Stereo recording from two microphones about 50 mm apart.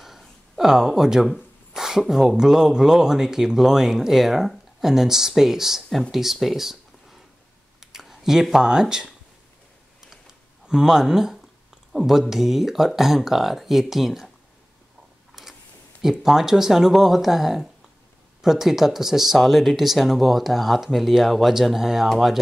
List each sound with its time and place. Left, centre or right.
0.6 s speech: centre
10.7 s speech: centre
16.0 s speech: centre